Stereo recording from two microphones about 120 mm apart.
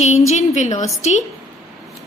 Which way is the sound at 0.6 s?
90° left.